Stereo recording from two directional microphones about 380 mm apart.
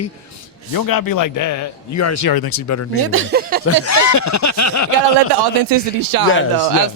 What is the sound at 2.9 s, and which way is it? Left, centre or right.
Speech, right.